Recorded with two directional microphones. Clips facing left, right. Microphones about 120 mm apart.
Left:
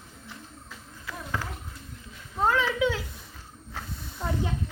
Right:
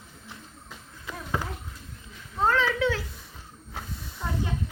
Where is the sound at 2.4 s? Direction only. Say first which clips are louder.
Even; 10° left (ahead or behind).